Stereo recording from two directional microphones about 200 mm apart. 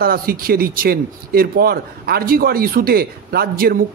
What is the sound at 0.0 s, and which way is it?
Speech, 45° right (ahead or behind).